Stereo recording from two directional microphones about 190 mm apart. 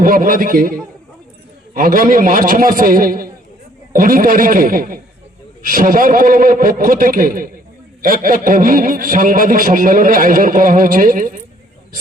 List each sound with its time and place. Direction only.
0.0 s a man's voice: 50° right (ahead or behind)